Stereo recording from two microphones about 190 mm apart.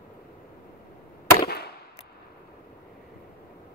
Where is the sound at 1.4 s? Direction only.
55° left (ahead or behind).